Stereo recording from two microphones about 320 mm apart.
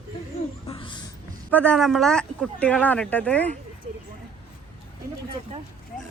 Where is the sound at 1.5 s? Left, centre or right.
Centre.